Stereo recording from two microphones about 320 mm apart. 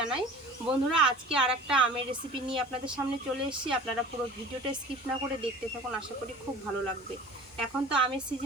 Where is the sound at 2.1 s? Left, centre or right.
Centre.